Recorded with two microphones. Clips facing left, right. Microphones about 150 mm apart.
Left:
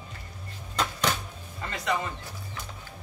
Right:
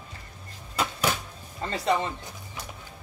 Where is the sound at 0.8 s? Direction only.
5° right (ahead or behind).